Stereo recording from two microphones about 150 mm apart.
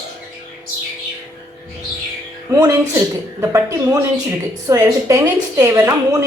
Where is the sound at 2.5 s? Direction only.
20° right (ahead or behind).